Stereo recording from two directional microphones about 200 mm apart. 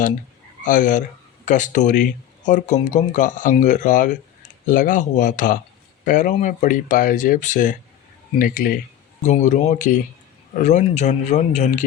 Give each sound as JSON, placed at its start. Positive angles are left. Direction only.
{"t": 0.6, "sound": "speech", "side_deg": 40}